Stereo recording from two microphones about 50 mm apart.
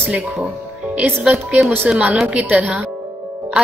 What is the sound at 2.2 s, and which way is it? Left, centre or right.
Speech, right.